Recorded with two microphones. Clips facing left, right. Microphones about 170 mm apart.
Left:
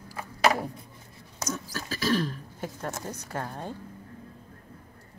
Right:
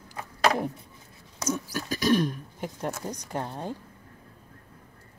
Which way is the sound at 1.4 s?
10° right (ahead or behind).